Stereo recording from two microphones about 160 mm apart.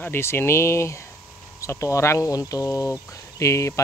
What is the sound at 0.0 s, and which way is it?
Speech, 15° left (ahead or behind).